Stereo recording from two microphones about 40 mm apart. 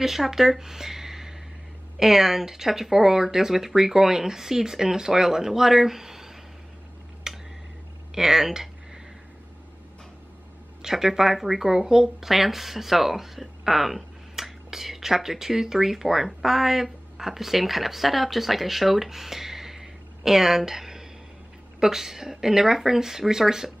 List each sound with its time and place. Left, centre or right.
0.0 s speech: centre
7.3 s tick: centre
8.1 s a sound: centre
10.8 s speech: centre